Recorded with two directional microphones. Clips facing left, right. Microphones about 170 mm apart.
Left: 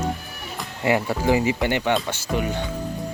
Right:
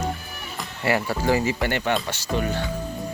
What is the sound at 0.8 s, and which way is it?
Speech, 20° left (ahead or behind).